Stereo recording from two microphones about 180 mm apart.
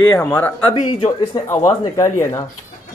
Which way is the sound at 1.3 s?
25° left (ahead or behind).